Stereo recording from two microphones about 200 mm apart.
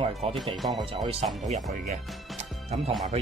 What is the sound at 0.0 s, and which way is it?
Speech, 25° right (ahead or behind).